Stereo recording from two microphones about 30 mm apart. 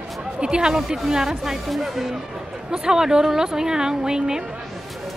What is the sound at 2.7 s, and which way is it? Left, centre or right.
Speech, right.